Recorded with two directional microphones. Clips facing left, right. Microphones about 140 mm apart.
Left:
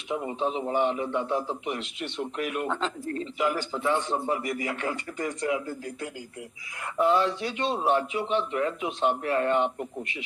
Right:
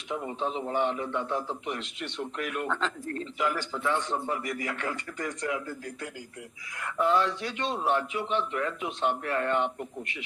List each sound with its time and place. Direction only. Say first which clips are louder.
0.1 s a man's voice: left 3 dB; 15° left (ahead or behind)